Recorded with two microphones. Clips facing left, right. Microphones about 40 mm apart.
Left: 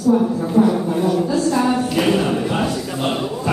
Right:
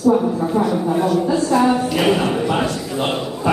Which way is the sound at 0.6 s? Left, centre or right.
Centre.